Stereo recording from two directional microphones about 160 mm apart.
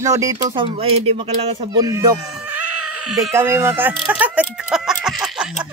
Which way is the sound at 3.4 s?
15° right (ahead or behind).